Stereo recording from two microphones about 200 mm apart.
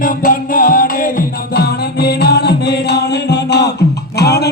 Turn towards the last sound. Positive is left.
turn(degrees=55)  # may be behind; listen again after turning